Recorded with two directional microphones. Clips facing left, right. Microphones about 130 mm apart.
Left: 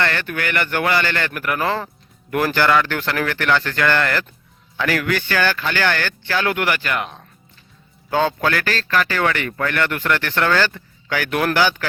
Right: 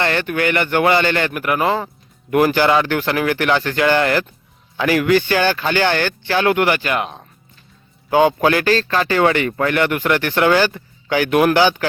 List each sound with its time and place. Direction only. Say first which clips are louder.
0.0 s a man's voice: right 4 dB; 20° right (ahead or behind)